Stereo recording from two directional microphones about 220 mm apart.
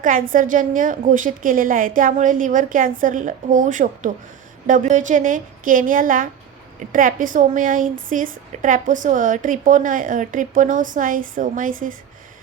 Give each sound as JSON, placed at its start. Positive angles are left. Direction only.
{"t": 0.0, "sound": "a woman's voice", "side_deg": -40}